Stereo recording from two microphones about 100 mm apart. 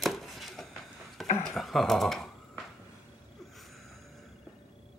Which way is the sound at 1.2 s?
Centre (ahead or behind).